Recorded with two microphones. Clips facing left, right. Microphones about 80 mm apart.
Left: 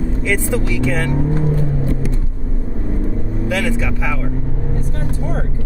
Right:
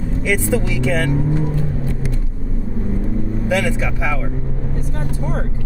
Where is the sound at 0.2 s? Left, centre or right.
Centre.